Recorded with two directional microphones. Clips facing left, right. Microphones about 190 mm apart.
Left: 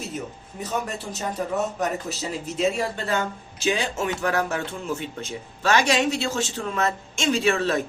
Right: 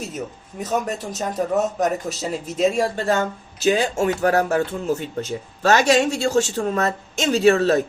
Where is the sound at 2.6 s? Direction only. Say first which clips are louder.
Right 5 dB; 45° right (ahead or behind).